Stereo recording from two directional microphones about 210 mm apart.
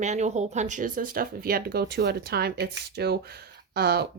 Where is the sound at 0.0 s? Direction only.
35° right (ahead or behind).